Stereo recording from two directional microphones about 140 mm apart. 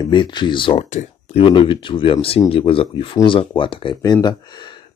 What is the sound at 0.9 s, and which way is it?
Speech, 55° left (ahead or behind).